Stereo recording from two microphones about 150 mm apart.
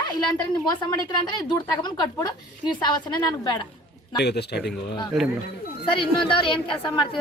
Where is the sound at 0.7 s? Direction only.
25° left (ahead or behind).